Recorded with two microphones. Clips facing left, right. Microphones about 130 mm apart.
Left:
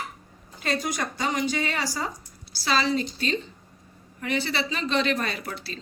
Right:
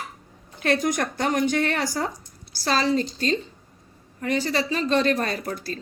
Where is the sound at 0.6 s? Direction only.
55° right (ahead or behind).